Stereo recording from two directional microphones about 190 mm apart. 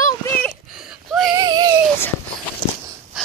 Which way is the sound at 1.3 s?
20° right (ahead or behind).